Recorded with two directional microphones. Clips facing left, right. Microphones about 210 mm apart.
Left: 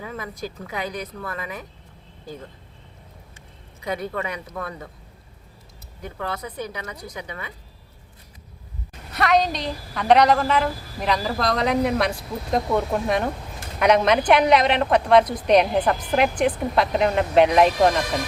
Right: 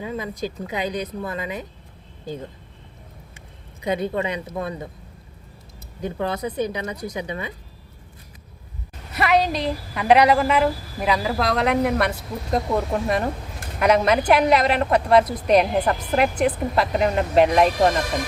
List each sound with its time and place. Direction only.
0.0 s speech: 20° right (ahead or behind)
3.8 s speech: 25° right (ahead or behind)
6.0 s speech: 20° right (ahead or behind)
9.1 s a woman's voice: 5° right (ahead or behind)